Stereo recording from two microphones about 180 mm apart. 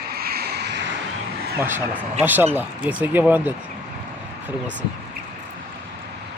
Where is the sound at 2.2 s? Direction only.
10° right (ahead or behind).